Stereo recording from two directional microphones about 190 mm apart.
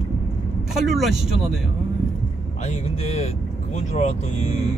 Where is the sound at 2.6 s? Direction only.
35° left (ahead or behind).